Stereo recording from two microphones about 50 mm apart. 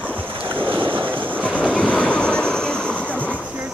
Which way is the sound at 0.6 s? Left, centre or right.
Right.